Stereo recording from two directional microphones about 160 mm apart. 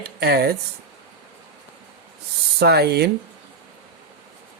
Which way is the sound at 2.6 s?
85° right.